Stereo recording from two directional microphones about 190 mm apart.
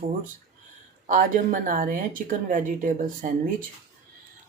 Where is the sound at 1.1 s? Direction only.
40° right (ahead or behind).